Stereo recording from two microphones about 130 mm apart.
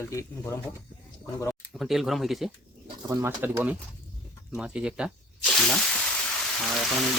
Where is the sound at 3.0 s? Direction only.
20° right (ahead or behind); by 5.8 s 5° left (ahead or behind).